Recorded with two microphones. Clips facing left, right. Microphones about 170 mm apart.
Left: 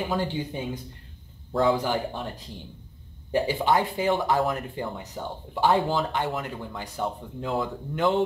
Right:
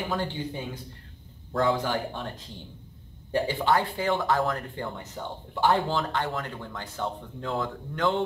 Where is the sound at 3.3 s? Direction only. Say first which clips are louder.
Left 1 dB; 15° left (ahead or behind).